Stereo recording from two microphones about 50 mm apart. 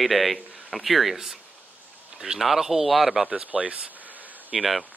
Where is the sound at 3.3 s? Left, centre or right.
Right.